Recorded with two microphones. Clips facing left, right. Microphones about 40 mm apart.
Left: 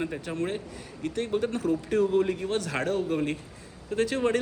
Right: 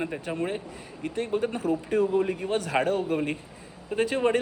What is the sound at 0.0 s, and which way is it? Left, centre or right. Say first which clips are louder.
A man's voice: right 1 dB; centre.